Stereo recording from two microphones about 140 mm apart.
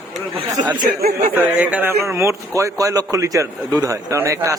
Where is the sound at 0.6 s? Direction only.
60° right (ahead or behind).